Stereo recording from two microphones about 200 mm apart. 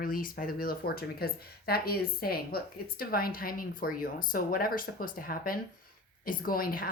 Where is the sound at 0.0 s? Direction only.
45° left (ahead or behind).